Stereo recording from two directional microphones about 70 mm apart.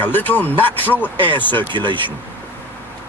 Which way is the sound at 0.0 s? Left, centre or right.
Left.